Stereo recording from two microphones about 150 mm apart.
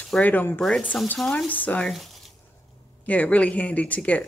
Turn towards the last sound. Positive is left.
turn(degrees=10)  # may be behind; listen again after turning